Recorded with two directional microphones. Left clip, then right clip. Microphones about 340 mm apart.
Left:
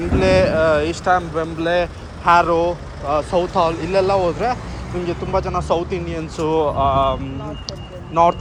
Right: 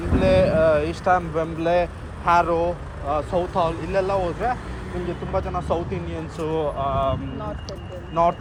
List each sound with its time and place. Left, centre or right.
0.2 s speech: centre
7.7 s run: centre